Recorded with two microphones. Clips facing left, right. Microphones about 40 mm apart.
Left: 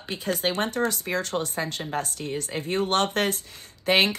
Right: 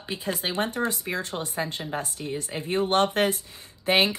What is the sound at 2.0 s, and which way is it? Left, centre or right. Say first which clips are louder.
Speech: left 1 dB; left.